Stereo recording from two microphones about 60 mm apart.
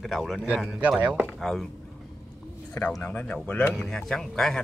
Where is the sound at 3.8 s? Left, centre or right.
Centre.